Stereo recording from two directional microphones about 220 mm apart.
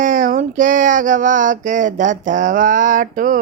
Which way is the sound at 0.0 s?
35° right (ahead or behind).